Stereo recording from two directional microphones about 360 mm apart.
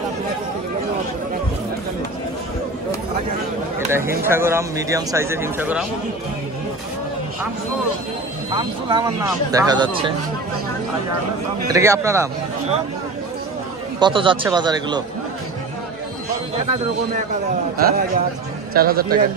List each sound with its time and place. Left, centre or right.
3.9 s speech: centre
8.5 s speech: centre
11.6 s speech: centre
13.9 s speech: centre
17.7 s speech: right